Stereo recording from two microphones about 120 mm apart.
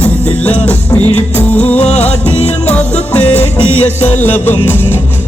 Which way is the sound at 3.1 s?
10° left (ahead or behind).